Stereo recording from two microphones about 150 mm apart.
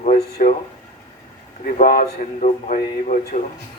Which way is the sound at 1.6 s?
65° left (ahead or behind).